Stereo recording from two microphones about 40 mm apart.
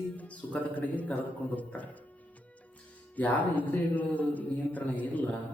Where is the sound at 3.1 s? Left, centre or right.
Left.